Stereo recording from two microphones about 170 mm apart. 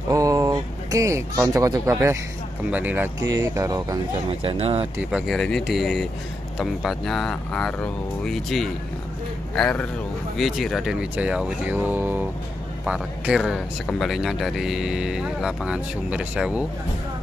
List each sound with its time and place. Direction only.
0.1 s speech: 20° right (ahead or behind)
4.3 s speech: 35° right (ahead or behind)
5.1 s speech: centre (ahead or behind)